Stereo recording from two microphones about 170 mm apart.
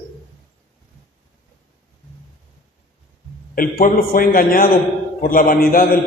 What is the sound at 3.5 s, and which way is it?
A man's voice, 55° left (ahead or behind).